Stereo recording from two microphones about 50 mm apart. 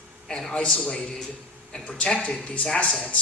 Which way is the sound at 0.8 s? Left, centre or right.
Left.